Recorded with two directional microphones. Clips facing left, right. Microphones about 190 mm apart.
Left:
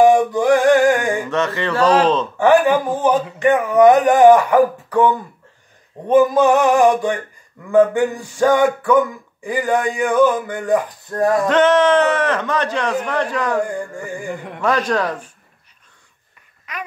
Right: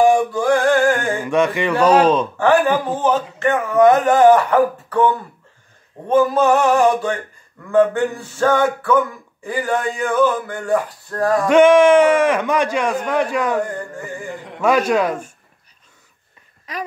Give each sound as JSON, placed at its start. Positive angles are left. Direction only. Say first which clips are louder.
{"t": 0.0, "sound": "a sound", "louder": "left 2 dB", "side_deg": 20}
{"t": 1.3, "sound": "speech", "louder": "right 3 dB", "side_deg": -15}
{"t": 2.3, "sound": "speech", "louder": "left 2 dB", "side_deg": 15}
{"t": 11.4, "sound": "speech", "louder": "right 6 dB", "side_deg": -10}
{"t": 13.6, "sound": "speech", "louder": "left 1 dB", "side_deg": 10}
{"t": 14.6, "sound": "speech", "louder": "right 3 dB", "side_deg": -10}